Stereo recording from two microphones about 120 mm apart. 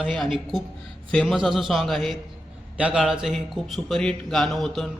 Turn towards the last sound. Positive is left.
turn(degrees=0)  # may be behind; listen again after turning